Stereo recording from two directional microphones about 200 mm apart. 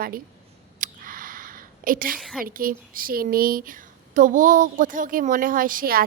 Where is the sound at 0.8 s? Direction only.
45° right (ahead or behind).